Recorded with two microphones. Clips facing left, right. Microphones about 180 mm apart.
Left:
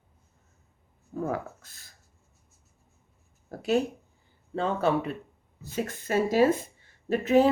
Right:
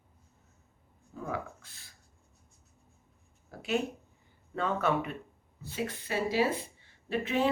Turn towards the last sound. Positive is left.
turn(degrees=40)  # may be behind; listen again after turning